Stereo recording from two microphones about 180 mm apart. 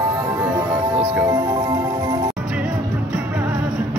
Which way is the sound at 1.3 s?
20° right (ahead or behind).